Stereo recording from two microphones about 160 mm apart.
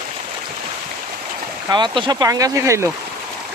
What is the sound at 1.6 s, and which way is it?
Speech, 30° right (ahead or behind).